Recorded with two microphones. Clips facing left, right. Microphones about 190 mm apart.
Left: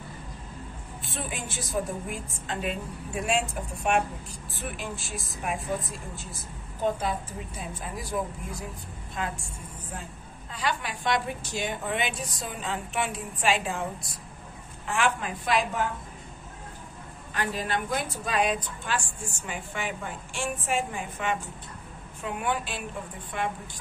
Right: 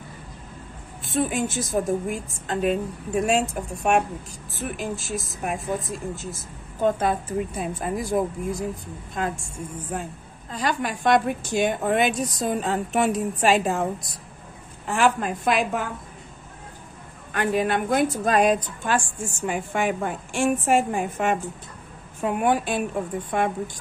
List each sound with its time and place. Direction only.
1.1 s a woman's voice: 45° right (ahead or behind)
10.5 s a woman's voice: 45° right (ahead or behind)
14.9 s a woman's voice: 45° right (ahead or behind)
17.3 s a woman's voice: 55° right (ahead or behind)